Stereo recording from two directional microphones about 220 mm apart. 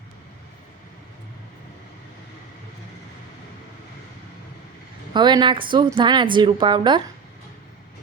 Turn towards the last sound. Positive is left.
turn(degrees=-20)  # may be behind; listen again after turning